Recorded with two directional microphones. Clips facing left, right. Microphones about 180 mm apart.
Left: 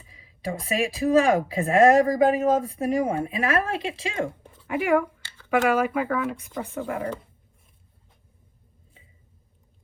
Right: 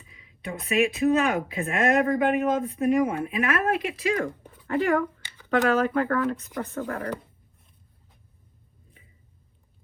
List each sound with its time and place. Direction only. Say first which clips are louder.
0.1 s speech: left 4 dB; 35° left (ahead or behind)
4.6 s speech: left 1 dB; 10° left (ahead or behind)